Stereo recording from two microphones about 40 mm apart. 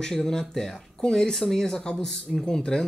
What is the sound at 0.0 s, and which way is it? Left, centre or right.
Speech, centre.